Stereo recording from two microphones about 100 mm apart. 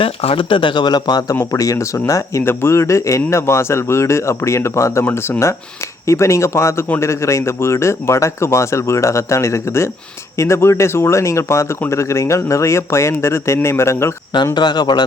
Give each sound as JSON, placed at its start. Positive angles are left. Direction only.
{"t": 0.0, "sound": "speech", "side_deg": 70}
{"t": 1.4, "sound": "speech", "side_deg": 35}
{"t": 6.8, "sound": "speech", "side_deg": 20}
{"t": 7.1, "sound": "speech", "side_deg": 30}
{"t": 14.5, "sound": "speech", "side_deg": 45}